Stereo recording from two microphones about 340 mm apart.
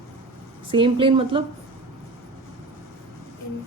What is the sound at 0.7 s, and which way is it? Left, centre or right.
Speech, centre.